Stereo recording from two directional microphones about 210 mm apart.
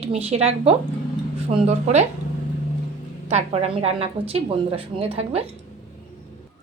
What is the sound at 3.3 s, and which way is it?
Speech, 30° right (ahead or behind).